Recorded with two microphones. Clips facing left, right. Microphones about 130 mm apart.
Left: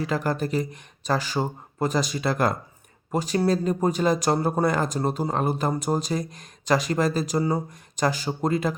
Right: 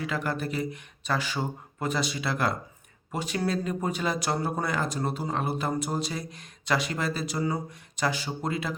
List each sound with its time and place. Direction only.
0.0 s speech: 40° left (ahead or behind)